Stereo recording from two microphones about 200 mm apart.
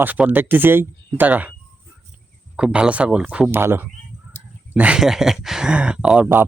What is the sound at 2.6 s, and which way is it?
Speech, 5° right (ahead or behind).